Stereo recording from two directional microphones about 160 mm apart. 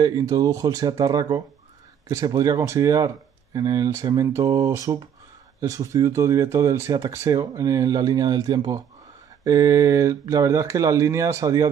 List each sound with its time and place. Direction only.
0.0 s speech: 20° right (ahead or behind)